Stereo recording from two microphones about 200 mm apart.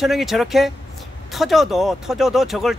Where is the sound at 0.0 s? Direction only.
Centre (ahead or behind).